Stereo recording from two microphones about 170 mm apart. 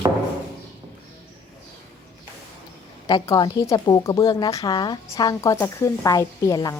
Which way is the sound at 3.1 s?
25° left (ahead or behind).